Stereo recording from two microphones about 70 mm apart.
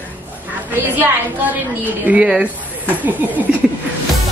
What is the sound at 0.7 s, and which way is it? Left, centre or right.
Speech, right.